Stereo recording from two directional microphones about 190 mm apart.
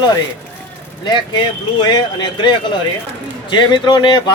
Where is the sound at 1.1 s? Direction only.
25° left (ahead or behind).